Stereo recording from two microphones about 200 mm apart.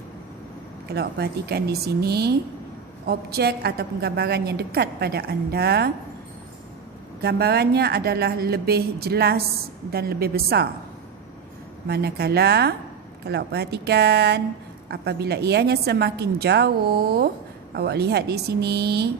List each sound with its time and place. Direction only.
0.9 s a woman's voice: 55° right (ahead or behind)
7.2 s a woman's voice: 55° right (ahead or behind)
11.9 s a woman's voice: 55° right (ahead or behind)